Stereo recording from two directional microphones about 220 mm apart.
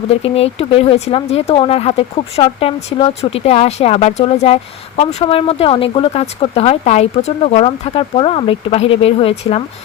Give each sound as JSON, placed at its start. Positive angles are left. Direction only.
{"t": 0.1, "sound": "speech", "side_deg": 25}